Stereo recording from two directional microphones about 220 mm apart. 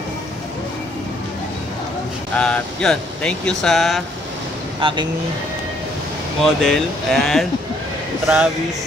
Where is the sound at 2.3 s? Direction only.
5° left (ahead or behind).